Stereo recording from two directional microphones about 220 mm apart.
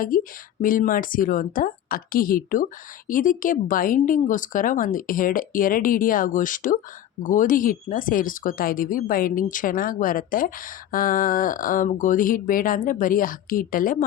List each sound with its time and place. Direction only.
0.1 s speech: 40° left (ahead or behind)